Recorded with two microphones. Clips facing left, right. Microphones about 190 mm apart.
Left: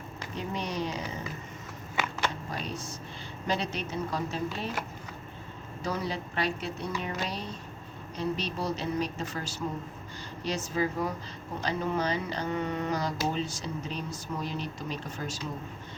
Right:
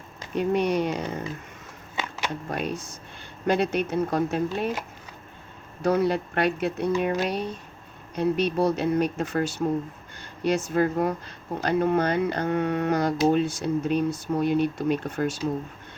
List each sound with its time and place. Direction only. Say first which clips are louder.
0.3 s speech: right 11 dB; 60° right (ahead or behind)
2.5 s speech: right 6 dB; 55° right (ahead or behind)
5.8 s speech: right 11 dB; 60° right (ahead or behind)